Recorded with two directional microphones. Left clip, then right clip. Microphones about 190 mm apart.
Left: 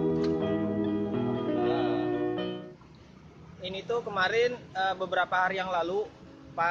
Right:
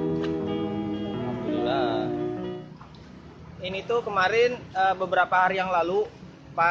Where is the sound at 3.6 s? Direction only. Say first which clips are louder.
Right 5 dB; 10° left (ahead or behind).